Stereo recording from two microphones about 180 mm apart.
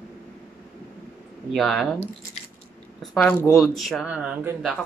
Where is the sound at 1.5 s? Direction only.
Centre (ahead or behind).